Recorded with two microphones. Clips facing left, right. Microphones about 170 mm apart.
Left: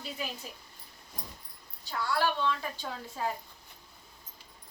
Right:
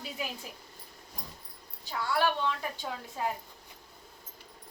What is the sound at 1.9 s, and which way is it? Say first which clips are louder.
A woman's voice: right 1 dB; 10° right (ahead or behind).